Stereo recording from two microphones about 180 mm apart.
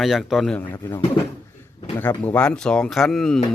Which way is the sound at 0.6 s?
20° left (ahead or behind).